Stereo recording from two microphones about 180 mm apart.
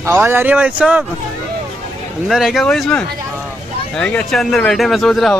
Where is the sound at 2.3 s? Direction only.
Centre (ahead or behind).